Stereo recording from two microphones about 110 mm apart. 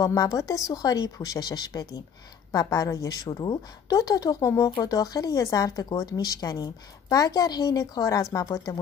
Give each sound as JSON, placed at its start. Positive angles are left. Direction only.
{"t": 0.0, "sound": "speech", "side_deg": 30}
{"t": 3.3, "sound": "speech", "side_deg": 40}